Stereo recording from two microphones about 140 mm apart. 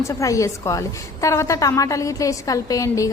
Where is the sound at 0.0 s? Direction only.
20° left (ahead or behind).